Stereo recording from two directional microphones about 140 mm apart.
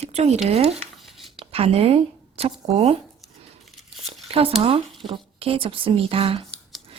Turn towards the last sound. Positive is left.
turn(degrees=5)  # may be behind; listen again after turning